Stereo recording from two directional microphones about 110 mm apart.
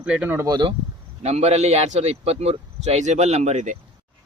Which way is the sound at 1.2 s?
80° right.